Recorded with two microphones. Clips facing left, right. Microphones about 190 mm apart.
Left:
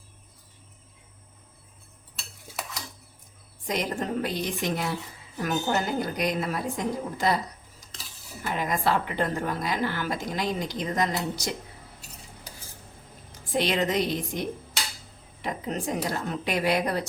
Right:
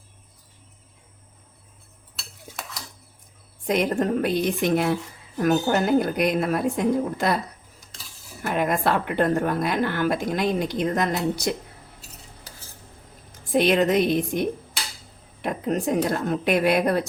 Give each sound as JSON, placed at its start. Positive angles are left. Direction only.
{"t": 3.7, "sound": "a woman's voice", "side_deg": -60}
{"t": 8.4, "sound": "a woman's voice", "side_deg": -55}
{"t": 13.5, "sound": "a woman's voice", "side_deg": -55}